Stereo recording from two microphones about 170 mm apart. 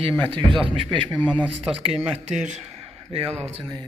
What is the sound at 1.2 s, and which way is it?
Speech, 10° left (ahead or behind).